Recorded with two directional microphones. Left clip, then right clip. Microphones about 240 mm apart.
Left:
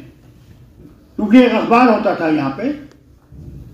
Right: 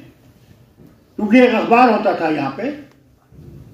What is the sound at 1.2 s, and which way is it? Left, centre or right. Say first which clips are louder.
Speech: left 1 dB; right.